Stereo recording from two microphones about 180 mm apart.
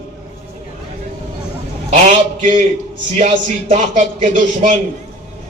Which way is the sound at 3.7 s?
40° right (ahead or behind).